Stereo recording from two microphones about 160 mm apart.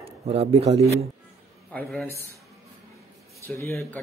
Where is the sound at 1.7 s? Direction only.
5° left (ahead or behind).